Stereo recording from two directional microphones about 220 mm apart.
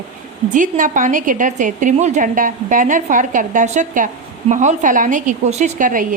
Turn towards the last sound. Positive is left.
turn(degrees=-35)  # may be behind; listen again after turning